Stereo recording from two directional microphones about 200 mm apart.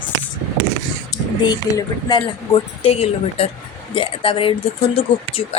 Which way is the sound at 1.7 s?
20° left (ahead or behind).